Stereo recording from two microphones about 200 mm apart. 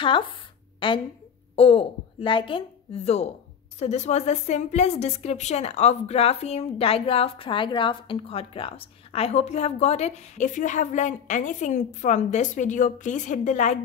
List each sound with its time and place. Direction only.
0.7 s a woman's voice: 25° left (ahead or behind)